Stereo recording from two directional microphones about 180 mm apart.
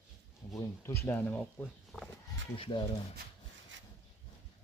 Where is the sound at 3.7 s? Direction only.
90° right.